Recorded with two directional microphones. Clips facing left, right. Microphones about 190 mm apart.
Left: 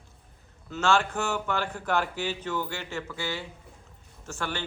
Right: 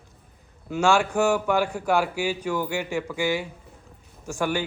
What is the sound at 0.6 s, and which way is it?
Speech, 15° right (ahead or behind).